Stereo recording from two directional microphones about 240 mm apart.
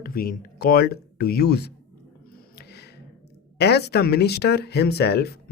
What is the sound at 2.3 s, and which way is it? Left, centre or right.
Music, left.